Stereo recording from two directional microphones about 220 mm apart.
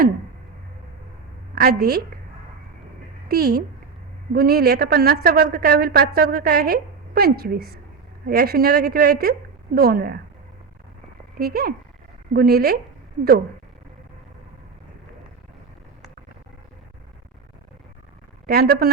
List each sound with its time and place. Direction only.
1.5 s a woman's voice: 45° right (ahead or behind)
3.2 s a woman's voice: 45° right (ahead or behind)
11.3 s a woman's voice: 45° right (ahead or behind)
18.4 s a woman's voice: 45° right (ahead or behind)